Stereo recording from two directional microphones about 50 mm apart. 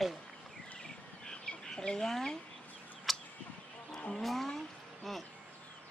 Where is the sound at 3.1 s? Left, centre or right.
Centre.